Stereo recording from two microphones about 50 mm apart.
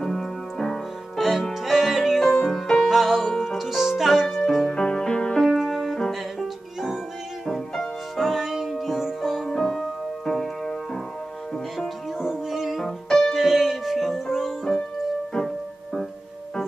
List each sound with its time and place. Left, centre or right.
0.0 s music: centre
2.3 s music: centre
5.4 s music: centre
5.9 s music: centre
9.4 s keyboard: centre
12.2 s music: centre
12.8 s music: centre
13.4 s music: centre